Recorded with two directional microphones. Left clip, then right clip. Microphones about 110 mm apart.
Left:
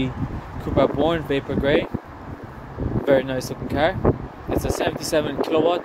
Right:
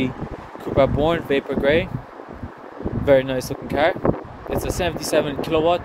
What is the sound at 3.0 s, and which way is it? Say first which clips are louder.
Speech: right 3 dB; 50° right (ahead or behind).